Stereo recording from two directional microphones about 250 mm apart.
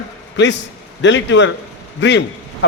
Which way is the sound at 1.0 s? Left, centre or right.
Left.